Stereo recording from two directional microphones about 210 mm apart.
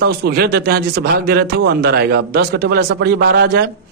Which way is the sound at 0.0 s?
50° right (ahead or behind).